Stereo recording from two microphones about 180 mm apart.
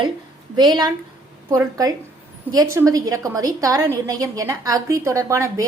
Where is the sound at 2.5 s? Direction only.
15° right (ahead or behind).